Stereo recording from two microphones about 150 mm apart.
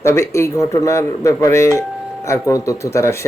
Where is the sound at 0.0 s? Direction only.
20° left (ahead or behind).